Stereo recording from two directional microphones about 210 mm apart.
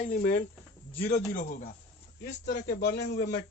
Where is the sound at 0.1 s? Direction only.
40° left (ahead or behind).